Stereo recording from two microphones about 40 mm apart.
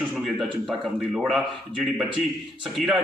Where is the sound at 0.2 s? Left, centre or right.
Centre.